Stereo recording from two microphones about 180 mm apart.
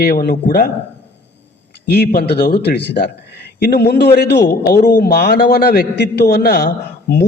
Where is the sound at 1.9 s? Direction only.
60° left (ahead or behind).